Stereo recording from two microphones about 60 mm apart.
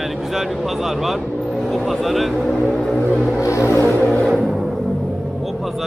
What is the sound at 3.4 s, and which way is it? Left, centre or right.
Music, left.